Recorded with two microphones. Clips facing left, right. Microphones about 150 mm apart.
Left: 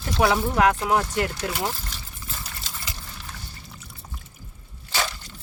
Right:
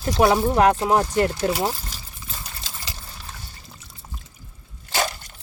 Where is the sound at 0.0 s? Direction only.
30° right (ahead or behind).